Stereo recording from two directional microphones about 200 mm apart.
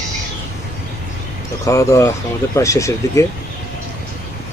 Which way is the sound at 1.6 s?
15° left (ahead or behind).